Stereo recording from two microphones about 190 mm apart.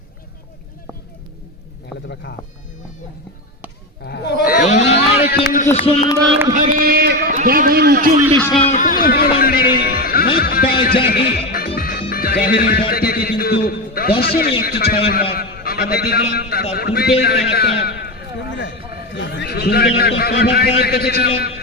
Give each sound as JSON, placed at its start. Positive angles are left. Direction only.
{"t": 2.3, "sound": "speech", "side_deg": 70}
{"t": 4.0, "sound": "speech", "side_deg": 60}
{"t": 4.6, "sound": "a sound", "side_deg": 35}
{"t": 4.9, "sound": "vehicle", "side_deg": 60}
{"t": 5.7, "sound": "speech", "side_deg": 30}
{"t": 6.5, "sound": "a man's voice", "side_deg": -45}
{"t": 8.5, "sound": "music", "side_deg": 35}
{"t": 12.9, "sound": "a sound", "side_deg": 50}
{"t": 14.2, "sound": "a man's voice", "side_deg": 55}